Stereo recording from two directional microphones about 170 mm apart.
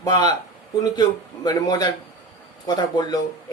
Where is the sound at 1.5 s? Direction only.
25° left (ahead or behind).